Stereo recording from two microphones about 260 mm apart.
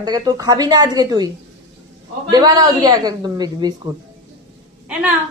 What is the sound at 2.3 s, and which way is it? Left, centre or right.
A woman's voice, centre.